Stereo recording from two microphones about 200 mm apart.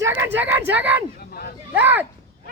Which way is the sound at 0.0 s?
10° right (ahead or behind).